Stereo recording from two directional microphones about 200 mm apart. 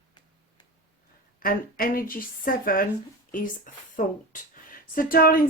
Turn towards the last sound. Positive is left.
turn(degrees=45)  # may be behind; listen again after turning